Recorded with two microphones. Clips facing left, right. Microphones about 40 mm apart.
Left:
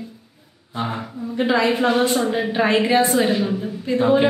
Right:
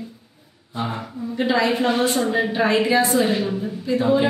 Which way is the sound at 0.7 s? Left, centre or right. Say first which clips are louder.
Left 1 dB; centre.